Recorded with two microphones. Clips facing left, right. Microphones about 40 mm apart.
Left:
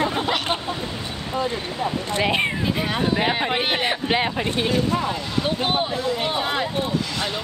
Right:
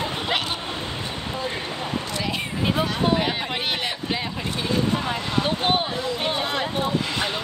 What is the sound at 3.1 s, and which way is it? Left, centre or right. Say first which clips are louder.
Speech: left 3 dB; left.